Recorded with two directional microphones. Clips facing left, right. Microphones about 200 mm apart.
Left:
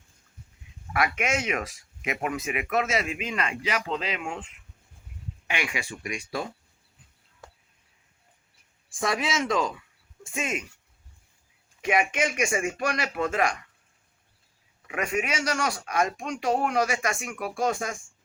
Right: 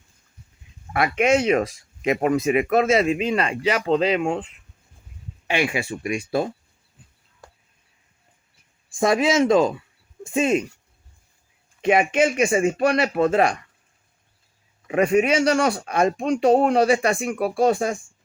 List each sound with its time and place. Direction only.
0.9 s speech: 30° right (ahead or behind)
9.0 s speech: 25° right (ahead or behind)
11.8 s speech: 30° right (ahead or behind)
14.8 s speech: 30° right (ahead or behind)